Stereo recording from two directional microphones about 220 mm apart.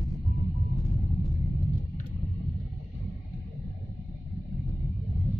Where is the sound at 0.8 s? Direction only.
Centre (ahead or behind).